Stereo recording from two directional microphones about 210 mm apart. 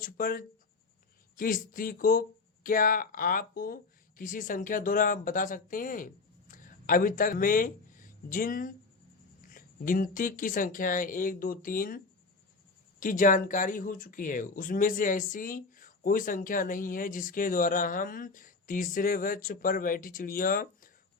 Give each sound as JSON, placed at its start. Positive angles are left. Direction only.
{"t": 0.0, "sound": "speech", "side_deg": 45}